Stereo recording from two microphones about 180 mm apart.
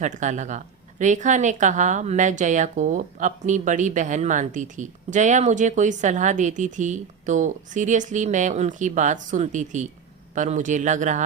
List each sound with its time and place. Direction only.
0.0 s speech: 45° right (ahead or behind)